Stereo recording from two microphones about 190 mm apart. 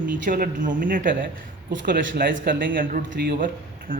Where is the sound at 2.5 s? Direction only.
50° right (ahead or behind).